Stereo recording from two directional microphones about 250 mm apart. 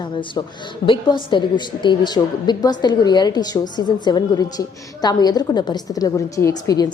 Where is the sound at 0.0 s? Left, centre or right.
Centre.